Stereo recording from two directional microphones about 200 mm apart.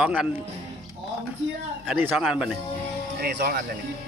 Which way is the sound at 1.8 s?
5° right (ahead or behind).